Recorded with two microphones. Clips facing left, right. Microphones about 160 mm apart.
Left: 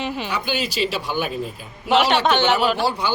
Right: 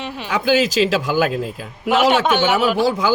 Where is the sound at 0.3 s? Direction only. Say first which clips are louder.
Right 8 dB; 90° right.